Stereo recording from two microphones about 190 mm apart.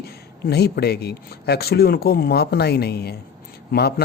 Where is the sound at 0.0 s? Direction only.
55° left (ahead or behind).